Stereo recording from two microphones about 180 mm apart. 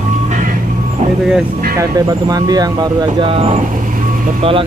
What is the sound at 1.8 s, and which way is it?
Speech, 20° right (ahead or behind).